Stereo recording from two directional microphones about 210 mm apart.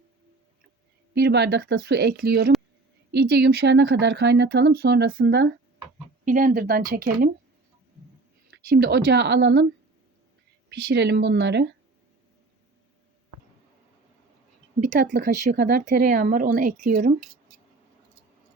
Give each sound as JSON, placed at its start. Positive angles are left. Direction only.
{"t": 1.1, "sound": "speech", "side_deg": -50}
{"t": 8.4, "sound": "speech", "side_deg": -50}
{"t": 10.7, "sound": "speech", "side_deg": -55}
{"t": 14.8, "sound": "speech", "side_deg": -35}